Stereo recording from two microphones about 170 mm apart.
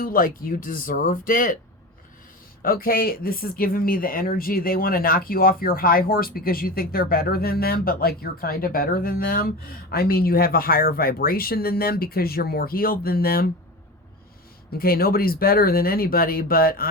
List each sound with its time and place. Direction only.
0.0 s speech: 55° left (ahead or behind)
2.6 s speech: 60° left (ahead or behind)
14.7 s speech: 60° left (ahead or behind)